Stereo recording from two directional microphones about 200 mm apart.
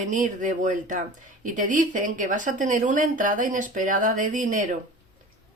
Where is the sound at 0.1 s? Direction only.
40° right (ahead or behind).